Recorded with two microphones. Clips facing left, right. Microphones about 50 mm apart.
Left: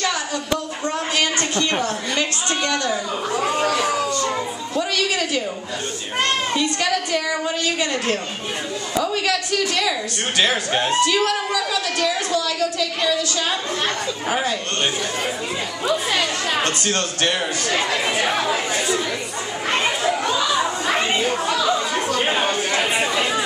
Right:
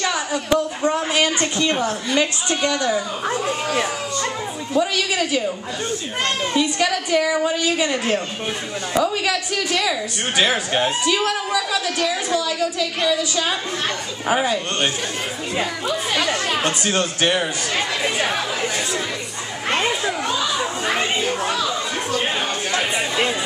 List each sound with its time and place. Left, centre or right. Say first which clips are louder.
0.0 s a woman's voice: right 1 dB; centre
4.7 s a woman's voice: right 2 dB; centre
6.5 s a woman's voice: right 1 dB; centre
16.6 s a woman's voice: right 1 dB; centre
21.9 s a sound: left 2 dB; left